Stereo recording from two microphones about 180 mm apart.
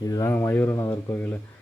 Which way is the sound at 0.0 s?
20° left (ahead or behind).